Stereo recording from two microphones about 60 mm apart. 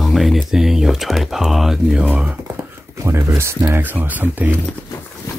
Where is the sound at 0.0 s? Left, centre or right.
Centre.